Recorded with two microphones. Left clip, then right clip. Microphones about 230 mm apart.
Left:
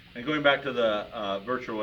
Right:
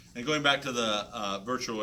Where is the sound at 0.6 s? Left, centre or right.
Right.